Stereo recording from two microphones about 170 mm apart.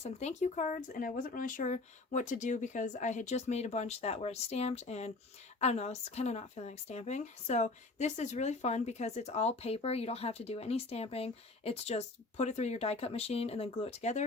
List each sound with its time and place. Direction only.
0.0 s speech: 40° left (ahead or behind)